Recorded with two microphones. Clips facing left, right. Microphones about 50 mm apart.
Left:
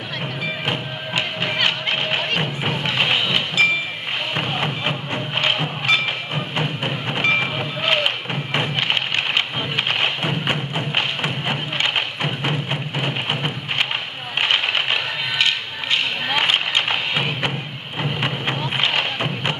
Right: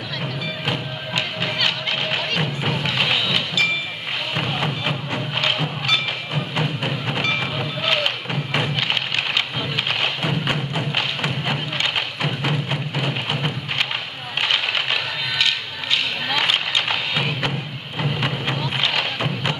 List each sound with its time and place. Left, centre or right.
0.7 s music: centre
7.2 s thump: centre
9.8 s music: centre
14.4 s a sound: centre
18.6 s music: centre